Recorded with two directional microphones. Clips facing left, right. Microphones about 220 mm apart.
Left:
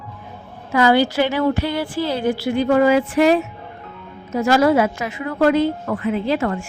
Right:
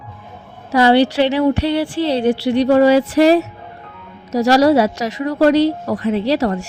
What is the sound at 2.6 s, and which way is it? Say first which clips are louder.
A woman's voice: right 3 dB; 35° right (ahead or behind).